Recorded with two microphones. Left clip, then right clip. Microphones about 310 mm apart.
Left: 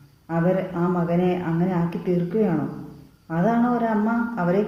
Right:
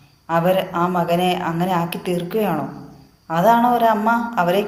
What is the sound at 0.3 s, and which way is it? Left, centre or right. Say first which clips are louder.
A woman's voice: right 6 dB; right.